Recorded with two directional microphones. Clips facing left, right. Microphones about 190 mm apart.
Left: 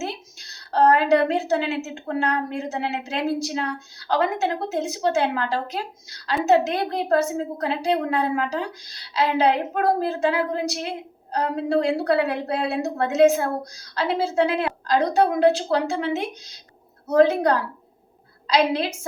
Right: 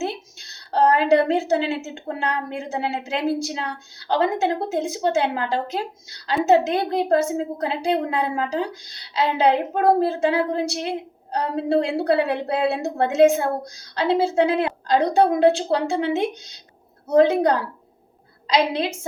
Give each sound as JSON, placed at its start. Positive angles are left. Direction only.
{"t": 0.0, "sound": "a woman's voice", "side_deg": -25}